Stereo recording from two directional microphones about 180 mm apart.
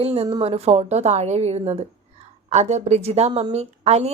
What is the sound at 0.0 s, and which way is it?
A woman's voice, 35° right (ahead or behind).